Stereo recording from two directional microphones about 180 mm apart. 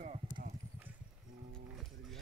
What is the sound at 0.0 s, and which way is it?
Clip-clop, 45° right (ahead or behind).